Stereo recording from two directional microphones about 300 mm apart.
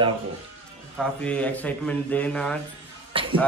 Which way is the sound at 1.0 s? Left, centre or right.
Centre.